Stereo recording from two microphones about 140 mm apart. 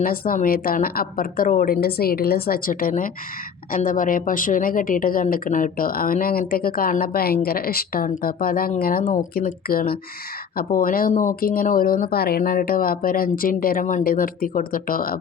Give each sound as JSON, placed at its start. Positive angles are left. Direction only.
{"t": 0.0, "sound": "speech", "side_deg": 90}
{"t": 3.7, "sound": "a woman's voice", "side_deg": 75}